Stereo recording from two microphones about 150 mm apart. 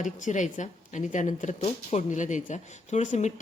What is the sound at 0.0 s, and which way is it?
A woman's voice, 55° left (ahead or behind).